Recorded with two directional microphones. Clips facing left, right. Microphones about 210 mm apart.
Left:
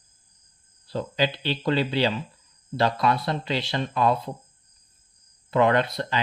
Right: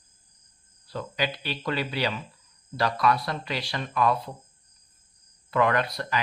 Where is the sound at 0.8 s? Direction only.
30° left (ahead or behind).